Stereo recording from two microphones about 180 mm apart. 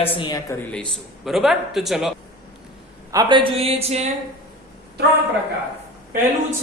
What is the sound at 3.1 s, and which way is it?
Speech, 30° right (ahead or behind).